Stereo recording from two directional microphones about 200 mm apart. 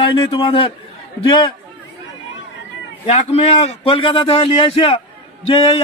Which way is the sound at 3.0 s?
30° left (ahead or behind).